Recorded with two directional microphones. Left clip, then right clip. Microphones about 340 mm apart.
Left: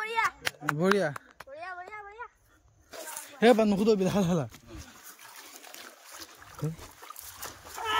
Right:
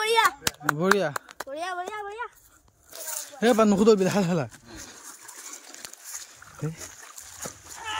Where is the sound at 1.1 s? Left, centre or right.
Centre.